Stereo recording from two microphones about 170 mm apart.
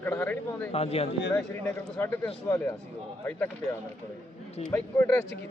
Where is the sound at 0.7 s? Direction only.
35° left (ahead or behind).